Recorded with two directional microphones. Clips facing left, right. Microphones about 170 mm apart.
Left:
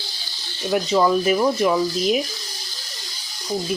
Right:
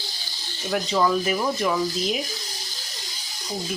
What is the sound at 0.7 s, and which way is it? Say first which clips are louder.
Speech: left 4 dB; 20° left (ahead or behind).